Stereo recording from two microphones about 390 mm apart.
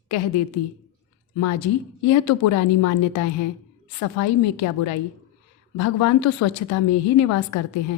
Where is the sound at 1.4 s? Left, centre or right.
Left.